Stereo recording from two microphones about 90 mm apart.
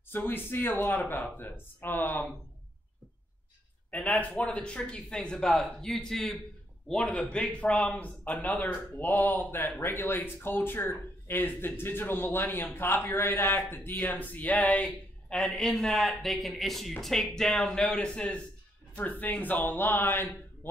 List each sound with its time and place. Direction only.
0.1 s speech: 25° left (ahead or behind)
3.9 s speech: 15° left (ahead or behind)